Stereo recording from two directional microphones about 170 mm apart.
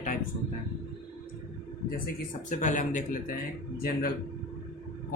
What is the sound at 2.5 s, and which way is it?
Speech, 50° left (ahead or behind).